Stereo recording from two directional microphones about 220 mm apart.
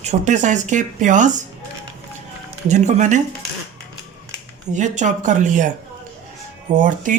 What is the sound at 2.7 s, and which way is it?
Speech, 35° right (ahead or behind).